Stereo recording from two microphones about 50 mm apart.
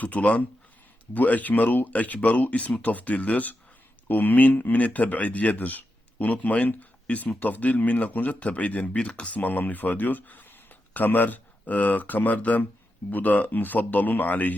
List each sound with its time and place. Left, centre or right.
0.0 s a man's voice: left